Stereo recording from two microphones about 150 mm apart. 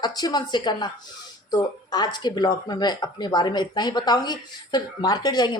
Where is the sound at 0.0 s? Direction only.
25° left (ahead or behind).